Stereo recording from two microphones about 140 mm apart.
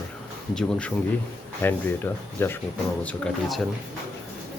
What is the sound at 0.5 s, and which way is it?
Speech, 10° left (ahead or behind).